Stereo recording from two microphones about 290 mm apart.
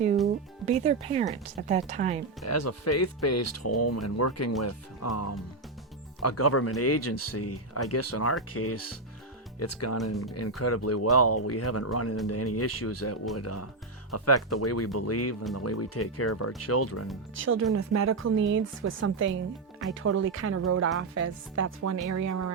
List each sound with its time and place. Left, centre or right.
0.6 s speech: right
2.4 s speech: left
9.6 s speech: left
17.3 s speech: right
18.3 s a woman's voice: right
20.0 s speech: right